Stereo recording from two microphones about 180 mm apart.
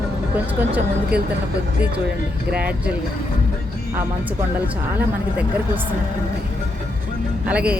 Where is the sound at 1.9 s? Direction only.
65° right (ahead or behind).